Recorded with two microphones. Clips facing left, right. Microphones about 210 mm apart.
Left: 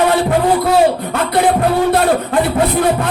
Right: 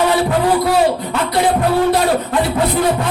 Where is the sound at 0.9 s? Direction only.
55° left (ahead or behind).